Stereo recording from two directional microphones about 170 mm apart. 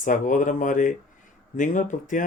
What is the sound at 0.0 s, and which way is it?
Speech, 50° left (ahead or behind).